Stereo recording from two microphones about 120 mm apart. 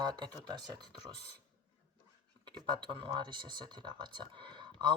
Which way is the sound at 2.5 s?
40° right (ahead or behind).